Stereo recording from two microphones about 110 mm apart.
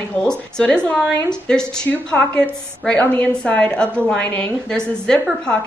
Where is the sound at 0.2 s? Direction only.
5° left (ahead or behind).